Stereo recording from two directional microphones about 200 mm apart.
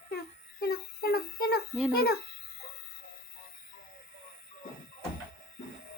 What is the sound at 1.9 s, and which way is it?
Speech, 50° left (ahead or behind).